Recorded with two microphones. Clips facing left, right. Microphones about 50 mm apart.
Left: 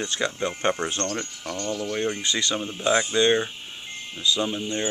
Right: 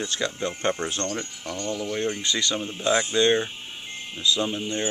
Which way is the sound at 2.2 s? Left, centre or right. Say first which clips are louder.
Even; centre.